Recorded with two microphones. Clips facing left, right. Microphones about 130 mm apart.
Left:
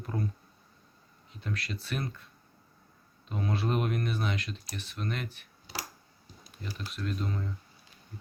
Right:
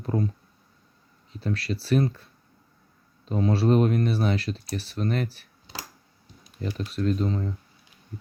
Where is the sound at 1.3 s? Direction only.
35° right (ahead or behind).